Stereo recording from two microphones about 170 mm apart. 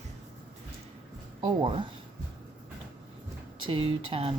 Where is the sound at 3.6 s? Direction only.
30° right (ahead or behind).